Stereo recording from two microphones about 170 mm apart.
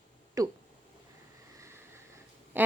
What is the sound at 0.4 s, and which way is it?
Speech, 20° right (ahead or behind).